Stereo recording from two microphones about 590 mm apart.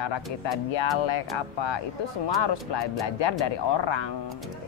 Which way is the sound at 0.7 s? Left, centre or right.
Left.